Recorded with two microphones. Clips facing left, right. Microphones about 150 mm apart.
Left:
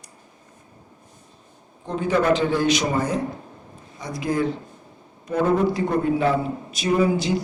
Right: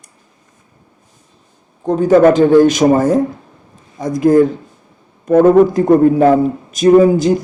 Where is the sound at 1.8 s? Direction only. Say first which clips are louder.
Right 11 dB; 45° right (ahead or behind).